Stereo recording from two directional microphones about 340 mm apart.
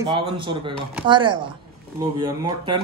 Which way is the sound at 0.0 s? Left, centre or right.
Centre.